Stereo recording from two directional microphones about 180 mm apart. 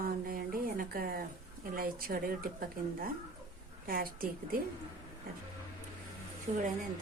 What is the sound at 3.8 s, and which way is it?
Speech, 55° right (ahead or behind).